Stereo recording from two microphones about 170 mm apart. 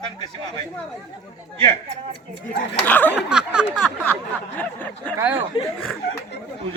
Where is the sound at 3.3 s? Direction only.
5° right (ahead or behind).